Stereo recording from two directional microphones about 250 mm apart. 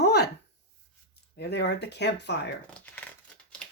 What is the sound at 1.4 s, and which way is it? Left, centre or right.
Speech, left.